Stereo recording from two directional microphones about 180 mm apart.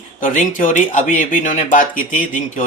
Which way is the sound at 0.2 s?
45° left (ahead or behind).